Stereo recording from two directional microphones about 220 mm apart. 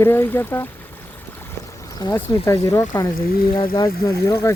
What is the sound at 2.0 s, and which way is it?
Speech, 15° left (ahead or behind).